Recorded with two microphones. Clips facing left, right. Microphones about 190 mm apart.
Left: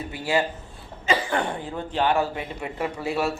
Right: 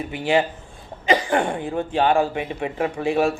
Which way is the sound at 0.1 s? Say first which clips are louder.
Right 4 dB; 20° right (ahead or behind).